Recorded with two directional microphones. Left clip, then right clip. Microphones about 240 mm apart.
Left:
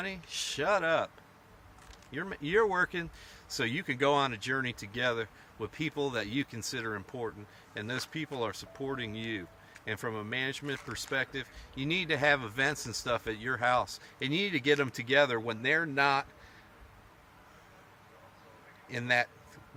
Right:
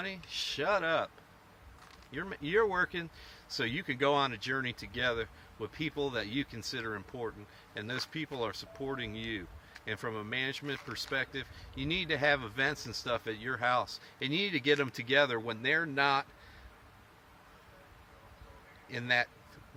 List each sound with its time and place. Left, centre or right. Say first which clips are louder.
0.3 s speech: left 2 dB; centre
2.1 s speech: left 2 dB; centre
18.9 s speech: left 2 dB; centre